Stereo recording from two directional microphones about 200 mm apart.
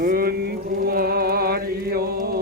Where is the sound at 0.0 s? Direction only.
45° right (ahead or behind).